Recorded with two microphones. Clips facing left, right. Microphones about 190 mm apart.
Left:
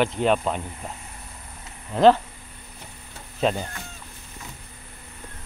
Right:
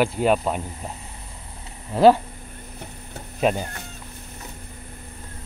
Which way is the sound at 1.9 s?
10° right (ahead or behind).